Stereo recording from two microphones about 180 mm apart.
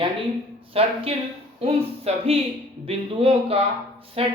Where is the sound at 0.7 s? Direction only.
35° right (ahead or behind).